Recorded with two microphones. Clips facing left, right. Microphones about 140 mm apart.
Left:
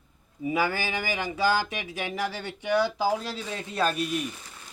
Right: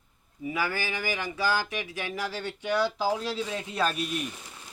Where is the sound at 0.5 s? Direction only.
20° left (ahead or behind).